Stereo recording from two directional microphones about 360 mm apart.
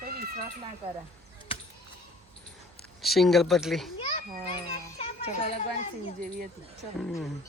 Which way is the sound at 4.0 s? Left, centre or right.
Centre.